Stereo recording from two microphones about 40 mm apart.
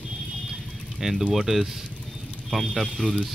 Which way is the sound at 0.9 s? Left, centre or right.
Centre.